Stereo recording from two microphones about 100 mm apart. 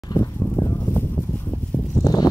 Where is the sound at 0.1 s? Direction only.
40° left (ahead or behind).